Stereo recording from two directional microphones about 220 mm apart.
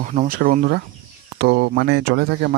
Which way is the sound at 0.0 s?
35° right (ahead or behind).